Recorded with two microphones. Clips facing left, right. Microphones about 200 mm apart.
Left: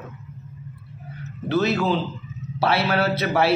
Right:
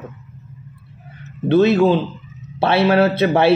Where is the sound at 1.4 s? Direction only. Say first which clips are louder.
Right 8 dB; 25° right (ahead or behind).